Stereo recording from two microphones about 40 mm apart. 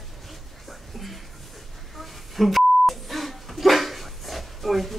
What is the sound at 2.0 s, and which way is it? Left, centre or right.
Beep, centre.